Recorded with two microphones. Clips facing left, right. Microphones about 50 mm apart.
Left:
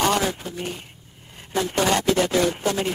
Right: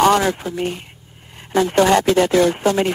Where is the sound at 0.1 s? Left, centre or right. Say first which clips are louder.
Right 6 dB; right.